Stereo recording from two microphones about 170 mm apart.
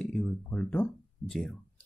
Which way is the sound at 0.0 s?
10° left (ahead or behind).